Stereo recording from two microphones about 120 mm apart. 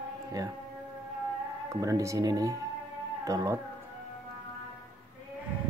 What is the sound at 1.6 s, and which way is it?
Speech, 30° right (ahead or behind).